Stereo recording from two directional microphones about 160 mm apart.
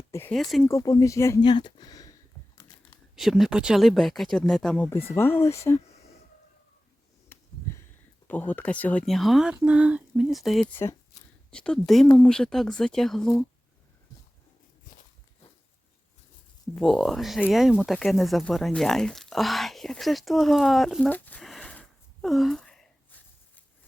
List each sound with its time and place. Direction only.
0.1 s speech: 15° left (ahead or behind)
3.2 s speech: centre (ahead or behind); by 5.5 s 15° left (ahead or behind)
7.3 s a sound: 15° left (ahead or behind)
8.3 s speech: 10° left (ahead or behind)
16.7 s speech: 5° left (ahead or behind)